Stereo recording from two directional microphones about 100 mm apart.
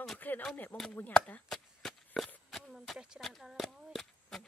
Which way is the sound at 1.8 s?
Centre (ahead or behind).